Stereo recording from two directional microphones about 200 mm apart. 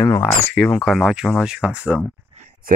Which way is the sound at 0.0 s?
15° left (ahead or behind).